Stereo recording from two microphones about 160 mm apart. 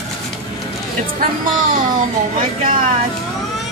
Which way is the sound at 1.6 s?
60° right (ahead or behind).